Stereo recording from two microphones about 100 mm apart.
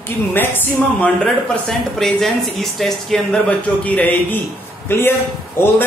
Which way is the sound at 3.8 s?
15° left (ahead or behind).